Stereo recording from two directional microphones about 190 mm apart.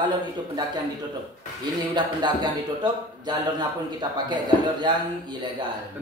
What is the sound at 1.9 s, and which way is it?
Speech, 25° right (ahead or behind).